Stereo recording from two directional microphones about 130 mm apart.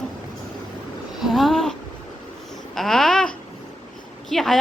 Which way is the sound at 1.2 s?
Centre (ahead or behind).